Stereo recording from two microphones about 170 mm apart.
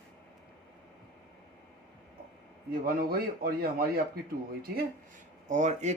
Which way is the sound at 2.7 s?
60° right (ahead or behind).